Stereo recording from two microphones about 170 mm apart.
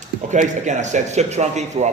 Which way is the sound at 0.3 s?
45° right (ahead or behind).